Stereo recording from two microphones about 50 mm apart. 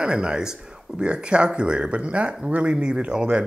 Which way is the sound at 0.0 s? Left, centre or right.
Centre.